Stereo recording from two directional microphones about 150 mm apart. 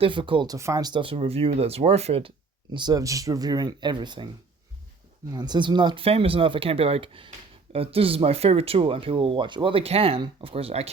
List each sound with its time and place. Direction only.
0.0 s speech: 35° right (ahead or behind)
2.7 s speech: 25° right (ahead or behind)
5.3 s speech: 30° right (ahead or behind)